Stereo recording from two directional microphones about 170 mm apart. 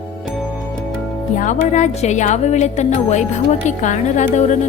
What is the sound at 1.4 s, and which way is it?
Speech, 45° left (ahead or behind).